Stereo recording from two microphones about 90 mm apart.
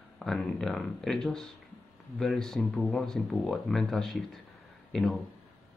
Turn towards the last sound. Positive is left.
turn(degrees=5)  # may be behind; listen again after turning